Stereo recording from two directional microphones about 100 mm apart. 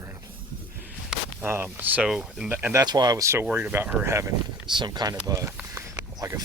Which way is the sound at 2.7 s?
40° right (ahead or behind).